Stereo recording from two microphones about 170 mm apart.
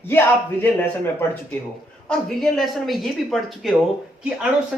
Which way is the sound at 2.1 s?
5° left (ahead or behind).